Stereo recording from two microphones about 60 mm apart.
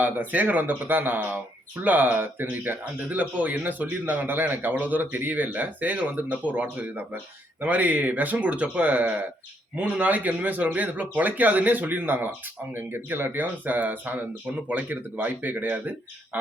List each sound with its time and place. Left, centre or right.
0.0 s speech: right